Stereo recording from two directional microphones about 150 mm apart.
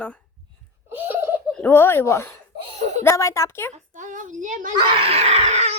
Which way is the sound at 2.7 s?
45° right (ahead or behind).